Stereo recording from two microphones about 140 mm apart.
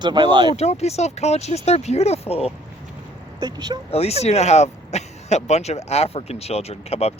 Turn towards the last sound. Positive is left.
turn(degrees=45)  # may be behind; listen again after turning